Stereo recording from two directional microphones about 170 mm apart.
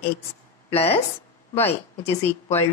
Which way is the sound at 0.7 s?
35° left (ahead or behind).